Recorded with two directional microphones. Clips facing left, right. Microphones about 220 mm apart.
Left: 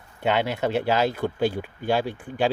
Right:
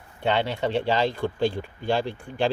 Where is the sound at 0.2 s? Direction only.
10° left (ahead or behind).